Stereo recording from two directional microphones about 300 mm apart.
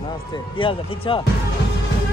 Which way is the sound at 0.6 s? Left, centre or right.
Centre.